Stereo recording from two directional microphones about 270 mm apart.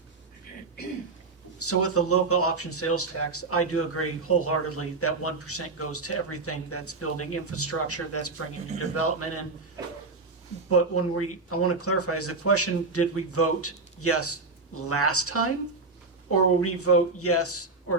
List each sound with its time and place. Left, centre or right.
1.5 s speech: left
10.7 s speech: left